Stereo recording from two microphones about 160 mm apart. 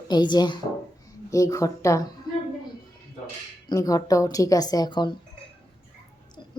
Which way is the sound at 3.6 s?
20° left (ahead or behind).